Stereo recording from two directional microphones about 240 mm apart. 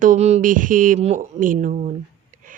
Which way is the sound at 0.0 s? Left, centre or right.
Right.